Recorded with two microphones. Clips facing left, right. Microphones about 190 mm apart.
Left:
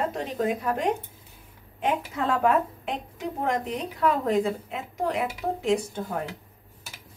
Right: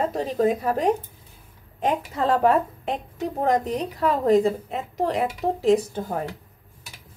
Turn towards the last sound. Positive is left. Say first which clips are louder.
# right 5 dB
turn(degrees=-35)  # may be behind; listen again after turning